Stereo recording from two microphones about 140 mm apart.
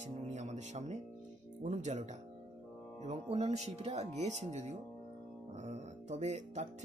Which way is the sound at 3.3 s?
50° right (ahead or behind).